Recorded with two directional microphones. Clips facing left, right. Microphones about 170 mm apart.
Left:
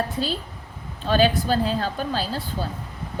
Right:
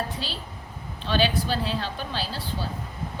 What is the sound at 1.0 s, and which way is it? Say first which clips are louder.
A woman's voice: left 5 dB; 45° left (ahead or behind).